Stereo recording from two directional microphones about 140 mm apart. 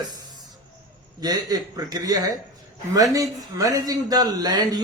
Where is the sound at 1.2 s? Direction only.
30° right (ahead or behind).